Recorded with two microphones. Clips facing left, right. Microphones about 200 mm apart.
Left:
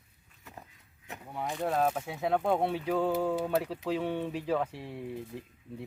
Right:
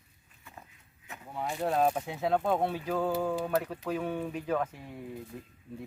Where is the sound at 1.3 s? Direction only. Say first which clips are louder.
Right 1 dB; centre (ahead or behind).